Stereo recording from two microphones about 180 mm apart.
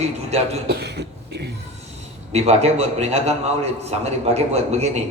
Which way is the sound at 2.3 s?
35° right (ahead or behind).